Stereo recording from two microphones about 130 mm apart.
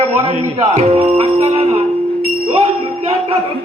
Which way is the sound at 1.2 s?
50° right (ahead or behind).